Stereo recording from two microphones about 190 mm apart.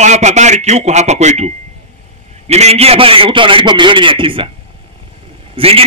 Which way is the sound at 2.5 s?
35° right (ahead or behind).